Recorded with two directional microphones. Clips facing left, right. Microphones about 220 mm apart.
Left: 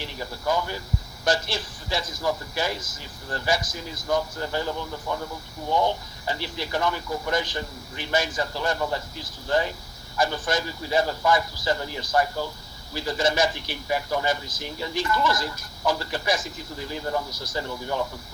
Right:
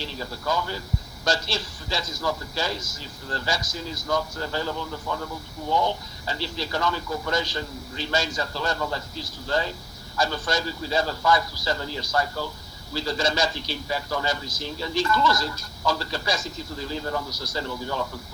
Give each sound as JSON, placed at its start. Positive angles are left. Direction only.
{"t": 0.0, "sound": "speech", "side_deg": 15}